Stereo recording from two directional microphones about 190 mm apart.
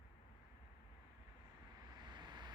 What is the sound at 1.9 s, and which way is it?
Vehicle, 25° right (ahead or behind).